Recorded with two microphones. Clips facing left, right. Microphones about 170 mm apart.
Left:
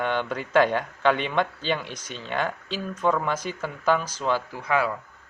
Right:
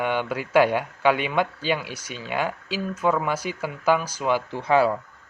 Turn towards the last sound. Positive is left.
turn(degrees=-30)  # may be behind; listen again after turning